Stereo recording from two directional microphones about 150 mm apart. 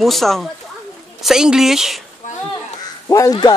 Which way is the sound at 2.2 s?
55° left (ahead or behind).